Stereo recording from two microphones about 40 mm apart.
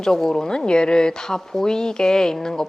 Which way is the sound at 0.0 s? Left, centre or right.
Centre.